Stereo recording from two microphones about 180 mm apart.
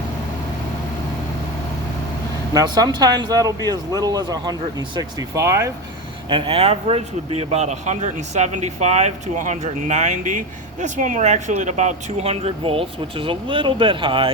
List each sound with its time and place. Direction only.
2.5 s speech: 20° right (ahead or behind)
6.2 s speech: 25° right (ahead or behind)